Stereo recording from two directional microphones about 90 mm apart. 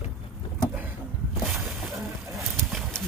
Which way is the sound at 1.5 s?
Centre (ahead or behind).